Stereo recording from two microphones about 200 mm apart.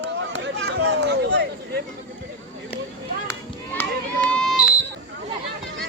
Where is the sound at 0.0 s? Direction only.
65° right (ahead or behind).